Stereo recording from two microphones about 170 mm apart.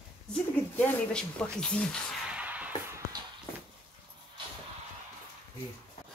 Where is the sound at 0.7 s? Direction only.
10° left (ahead or behind).